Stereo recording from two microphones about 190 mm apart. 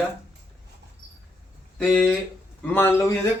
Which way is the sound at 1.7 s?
5° right (ahead or behind).